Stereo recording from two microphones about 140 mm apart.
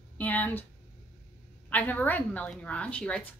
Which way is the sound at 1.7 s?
10° left (ahead or behind).